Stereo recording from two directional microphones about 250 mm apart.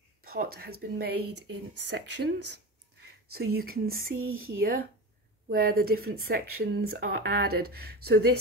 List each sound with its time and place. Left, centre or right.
0.2 s speech: right
1.1 s speech: right
1.5 s speech: right
4.2 s speech: right
4.6 s speech: right